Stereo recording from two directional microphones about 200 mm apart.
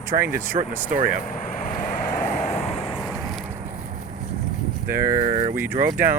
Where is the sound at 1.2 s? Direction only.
40° left (ahead or behind).